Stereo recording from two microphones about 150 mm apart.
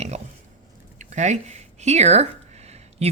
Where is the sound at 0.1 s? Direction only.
50° right (ahead or behind).